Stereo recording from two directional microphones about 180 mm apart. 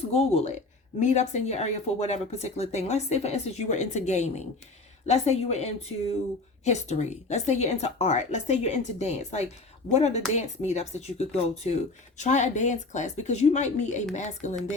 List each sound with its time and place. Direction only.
0.1 s speech: 35° left (ahead or behind)